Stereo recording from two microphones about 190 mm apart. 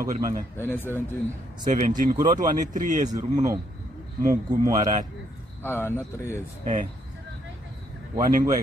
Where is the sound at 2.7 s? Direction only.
40° right (ahead or behind).